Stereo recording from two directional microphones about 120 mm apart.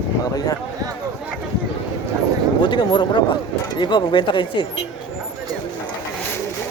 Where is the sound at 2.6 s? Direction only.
40° left (ahead or behind).